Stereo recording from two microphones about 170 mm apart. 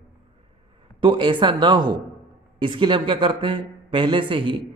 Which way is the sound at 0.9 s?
30° right (ahead or behind).